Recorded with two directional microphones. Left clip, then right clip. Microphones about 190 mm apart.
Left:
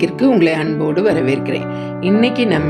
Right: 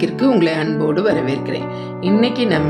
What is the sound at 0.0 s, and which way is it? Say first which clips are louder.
A woman's voice: left 2 dB; 5° left (ahead or behind).